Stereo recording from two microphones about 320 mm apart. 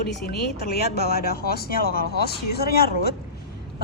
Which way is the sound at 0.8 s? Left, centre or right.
Left.